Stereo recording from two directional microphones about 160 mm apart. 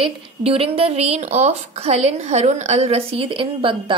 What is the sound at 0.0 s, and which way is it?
A woman's voice, 35° right (ahead or behind).